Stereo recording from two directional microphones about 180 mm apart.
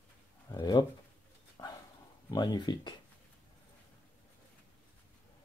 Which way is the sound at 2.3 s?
25° left (ahead or behind).